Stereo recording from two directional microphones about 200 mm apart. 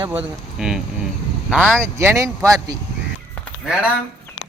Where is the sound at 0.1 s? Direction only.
5° right (ahead or behind).